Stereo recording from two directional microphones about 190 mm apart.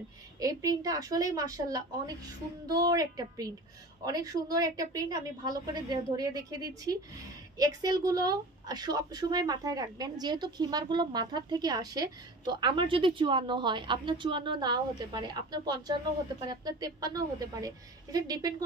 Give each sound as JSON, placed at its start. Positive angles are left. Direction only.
{"t": 0.4, "sound": "a woman's voice", "side_deg": -20}